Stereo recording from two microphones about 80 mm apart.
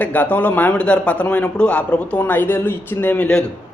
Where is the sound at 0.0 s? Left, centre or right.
Centre.